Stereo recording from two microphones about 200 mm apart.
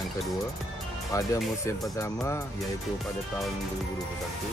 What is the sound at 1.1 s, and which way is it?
Speech, 15° left (ahead or behind).